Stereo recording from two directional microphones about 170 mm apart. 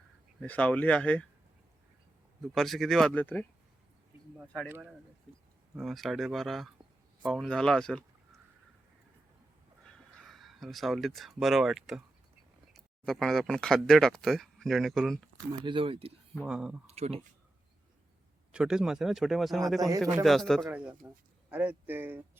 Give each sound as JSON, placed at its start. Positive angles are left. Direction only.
{"t": 0.3, "sound": "speech", "side_deg": 10}
{"t": 2.4, "sound": "speech", "side_deg": 0}
{"t": 4.7, "sound": "speech", "side_deg": -10}
{"t": 9.8, "sound": "speech", "side_deg": 0}
{"t": 15.6, "sound": "speech", "side_deg": -30}
{"t": 16.4, "sound": "speech", "side_deg": -5}
{"t": 16.8, "sound": "speech", "side_deg": -40}
{"t": 18.5, "sound": "speech", "side_deg": -5}
{"t": 20.7, "sound": "speech", "side_deg": -10}